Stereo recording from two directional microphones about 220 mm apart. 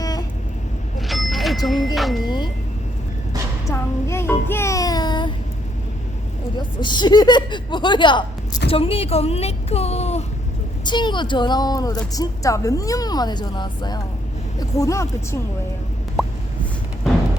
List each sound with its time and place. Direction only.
0.0 s vehicle: 15° left (ahead or behind)
0.9 s vehicle: centre (ahead or behind)
2.0 s music: centre (ahead or behind)
3.7 s music: 10° left (ahead or behind)
6.6 s speech: 20° left (ahead or behind)
16.2 s a sound: centre (ahead or behind)